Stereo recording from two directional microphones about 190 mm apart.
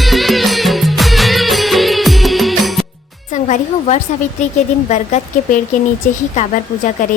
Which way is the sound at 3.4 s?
35° left (ahead or behind).